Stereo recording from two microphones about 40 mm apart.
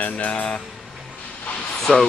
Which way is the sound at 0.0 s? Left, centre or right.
Left.